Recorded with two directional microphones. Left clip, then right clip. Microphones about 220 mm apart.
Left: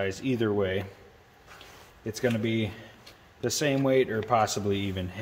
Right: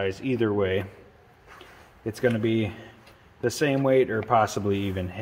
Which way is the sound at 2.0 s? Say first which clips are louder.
Right 4 dB; 25° right (ahead or behind).